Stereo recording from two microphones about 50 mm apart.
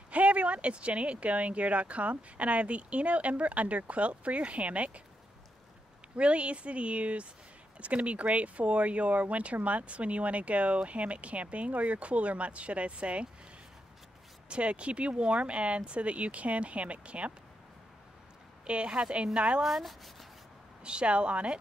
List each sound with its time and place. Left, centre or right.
0.1 s speech: right
6.1 s speech: right
14.5 s speech: right
18.7 s speech: right
19.6 s speech: centre
20.8 s speech: centre